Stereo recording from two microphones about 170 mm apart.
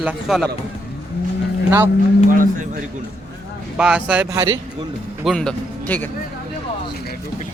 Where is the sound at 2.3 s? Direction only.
50° right (ahead or behind).